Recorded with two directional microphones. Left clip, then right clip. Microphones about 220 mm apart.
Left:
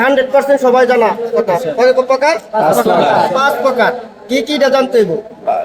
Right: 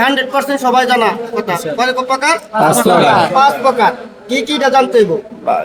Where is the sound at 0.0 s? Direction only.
20° right (ahead or behind).